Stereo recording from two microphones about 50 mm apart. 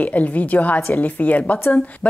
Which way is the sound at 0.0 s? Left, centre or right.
Left.